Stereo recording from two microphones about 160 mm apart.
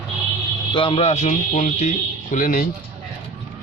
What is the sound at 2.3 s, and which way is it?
Speech, 55° left (ahead or behind).